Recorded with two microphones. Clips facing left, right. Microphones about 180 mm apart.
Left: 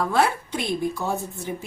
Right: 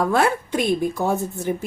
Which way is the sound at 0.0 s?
50° right (ahead or behind).